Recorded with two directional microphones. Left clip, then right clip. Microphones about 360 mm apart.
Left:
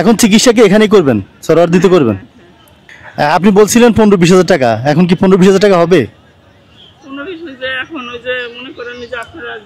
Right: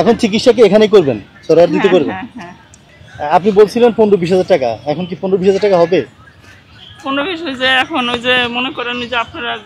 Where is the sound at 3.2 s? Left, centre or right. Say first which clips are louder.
Left 1 dB; left.